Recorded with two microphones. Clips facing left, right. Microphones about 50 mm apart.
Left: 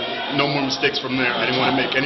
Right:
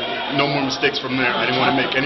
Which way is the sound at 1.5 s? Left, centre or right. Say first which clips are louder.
Right 2 dB; centre.